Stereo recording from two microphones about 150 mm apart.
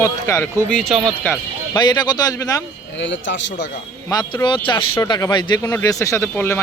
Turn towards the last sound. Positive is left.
turn(degrees=15)  # may be behind; listen again after turning